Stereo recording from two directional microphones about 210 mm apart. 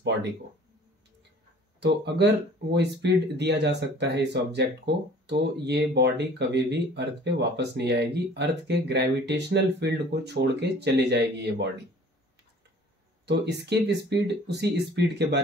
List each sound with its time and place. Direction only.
1.8 s speech: 50° right (ahead or behind)
13.2 s speech: 55° right (ahead or behind)